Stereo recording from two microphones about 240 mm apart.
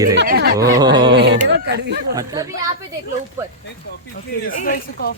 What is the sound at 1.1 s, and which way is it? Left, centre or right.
Speech, right.